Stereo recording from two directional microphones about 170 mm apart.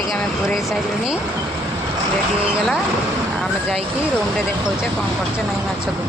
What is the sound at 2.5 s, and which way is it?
Speech, 5° right (ahead or behind).